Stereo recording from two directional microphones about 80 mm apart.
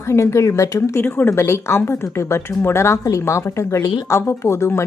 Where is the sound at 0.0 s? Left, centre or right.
Left.